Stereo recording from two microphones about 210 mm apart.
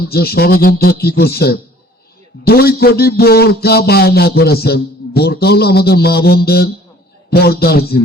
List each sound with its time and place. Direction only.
0.1 s a man's voice: 50° left (ahead or behind)